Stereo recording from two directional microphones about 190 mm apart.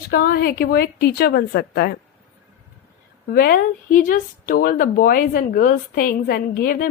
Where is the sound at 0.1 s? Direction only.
55° left (ahead or behind).